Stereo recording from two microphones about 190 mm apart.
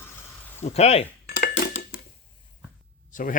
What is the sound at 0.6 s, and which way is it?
Speech, 35° left (ahead or behind).